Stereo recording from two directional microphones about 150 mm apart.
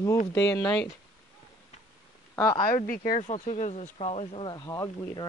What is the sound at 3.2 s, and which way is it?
Speech, 50° left (ahead or behind).